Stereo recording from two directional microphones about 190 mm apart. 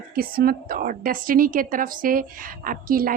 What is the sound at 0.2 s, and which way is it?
A woman's voice, 50° right (ahead or behind).